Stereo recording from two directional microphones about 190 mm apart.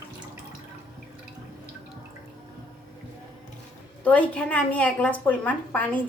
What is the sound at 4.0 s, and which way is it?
Speech, 5° left (ahead or behind).